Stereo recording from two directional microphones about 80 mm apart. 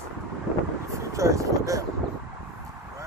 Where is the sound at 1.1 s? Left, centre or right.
Right.